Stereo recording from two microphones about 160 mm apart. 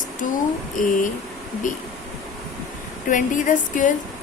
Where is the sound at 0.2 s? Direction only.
55° left (ahead or behind).